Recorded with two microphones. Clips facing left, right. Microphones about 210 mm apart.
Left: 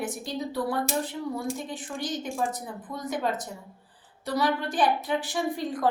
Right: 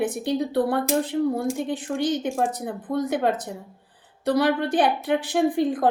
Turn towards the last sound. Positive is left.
turn(degrees=-55)  # may be behind; listen again after turning